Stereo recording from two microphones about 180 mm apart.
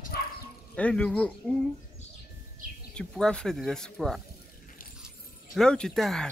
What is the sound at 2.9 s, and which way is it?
Speech, 5° left (ahead or behind).